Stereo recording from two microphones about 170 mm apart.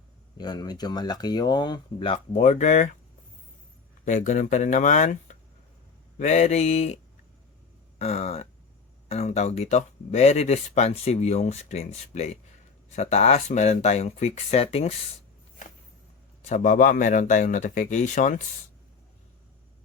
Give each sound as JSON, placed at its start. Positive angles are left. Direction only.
{"t": 0.3, "sound": "speech", "side_deg": 25}
{"t": 4.0, "sound": "a man's voice", "side_deg": 45}
{"t": 16.4, "sound": "a man's voice", "side_deg": 45}